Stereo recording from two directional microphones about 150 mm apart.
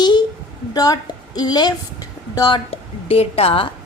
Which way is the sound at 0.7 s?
25° left (ahead or behind).